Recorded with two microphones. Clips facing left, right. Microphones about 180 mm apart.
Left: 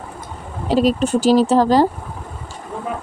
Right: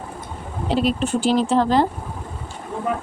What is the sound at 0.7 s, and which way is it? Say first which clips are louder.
Speech: left 4 dB; 40° left (ahead or behind).